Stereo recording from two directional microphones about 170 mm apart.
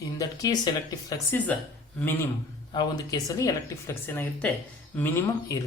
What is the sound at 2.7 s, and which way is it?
Speech, 25° left (ahead or behind).